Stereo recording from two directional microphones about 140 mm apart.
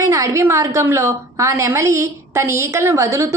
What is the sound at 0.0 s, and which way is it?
A woman's voice, 20° right (ahead or behind).